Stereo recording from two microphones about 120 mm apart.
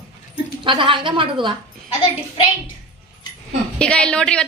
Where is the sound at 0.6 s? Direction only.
45° right (ahead or behind).